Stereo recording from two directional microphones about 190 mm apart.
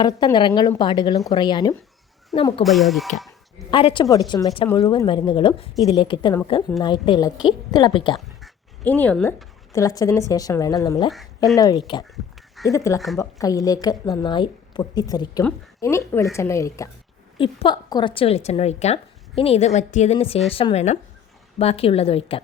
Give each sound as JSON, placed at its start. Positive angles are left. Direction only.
{"t": 0.0, "sound": "a woman's voice", "side_deg": 20}
{"t": 2.6, "sound": "speech", "side_deg": 0}
{"t": 3.7, "sound": "a woman's voice", "side_deg": 25}
{"t": 8.1, "sound": "speech", "side_deg": 5}
{"t": 9.7, "sound": "a woman's voice", "side_deg": 20}
{"t": 17.3, "sound": "a woman's voice", "side_deg": 25}